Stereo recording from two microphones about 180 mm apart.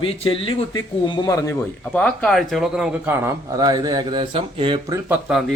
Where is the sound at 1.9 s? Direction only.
5° left (ahead or behind); by 4.7 s 30° right (ahead or behind).